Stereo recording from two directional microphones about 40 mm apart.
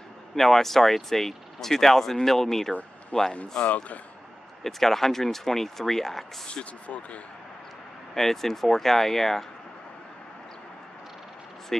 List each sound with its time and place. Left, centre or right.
0.4 s speech: centre
3.1 s speech: left
3.6 s speech: left
4.6 s speech: centre
6.4 s speech: left
8.1 s speech: centre